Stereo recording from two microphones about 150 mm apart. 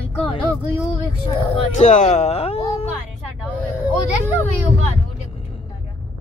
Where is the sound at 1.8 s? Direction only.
50° left (ahead or behind).